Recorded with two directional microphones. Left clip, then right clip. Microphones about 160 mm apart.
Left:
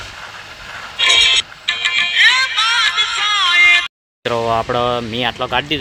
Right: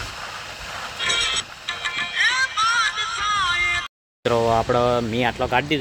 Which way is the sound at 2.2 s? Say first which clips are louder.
Left 6 dB; 25° left (ahead or behind).